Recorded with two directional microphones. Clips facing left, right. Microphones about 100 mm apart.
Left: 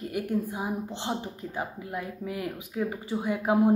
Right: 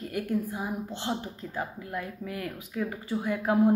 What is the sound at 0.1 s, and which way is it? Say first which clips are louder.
A woman's voice: even; 20° left (ahead or behind).